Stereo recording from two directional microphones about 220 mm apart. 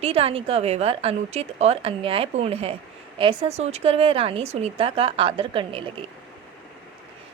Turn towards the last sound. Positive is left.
turn(degrees=-25)  # may be behind; listen again after turning